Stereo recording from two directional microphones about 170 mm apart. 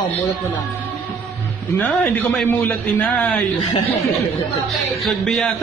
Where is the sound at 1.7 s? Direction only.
10° left (ahead or behind).